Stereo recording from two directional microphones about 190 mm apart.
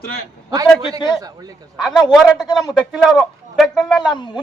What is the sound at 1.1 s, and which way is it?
Speech, 20° right (ahead or behind).